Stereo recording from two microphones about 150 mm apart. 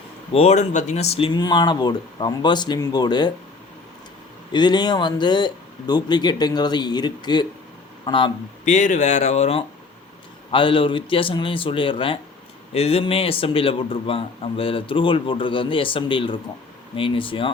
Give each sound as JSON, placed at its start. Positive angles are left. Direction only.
{"t": 0.3, "sound": "speech", "side_deg": 50}
{"t": 4.5, "sound": "a man's voice", "side_deg": 30}
{"t": 8.6, "sound": "a man's voice", "side_deg": 55}